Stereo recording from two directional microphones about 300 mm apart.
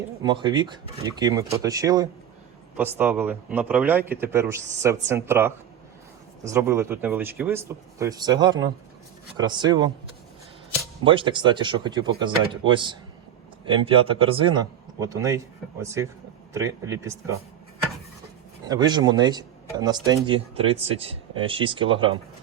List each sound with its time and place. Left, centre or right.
0.2 s speech: centre
11.0 s speech: centre
18.6 s speech: centre